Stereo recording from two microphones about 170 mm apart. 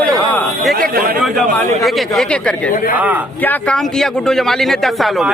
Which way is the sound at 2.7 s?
55° left (ahead or behind).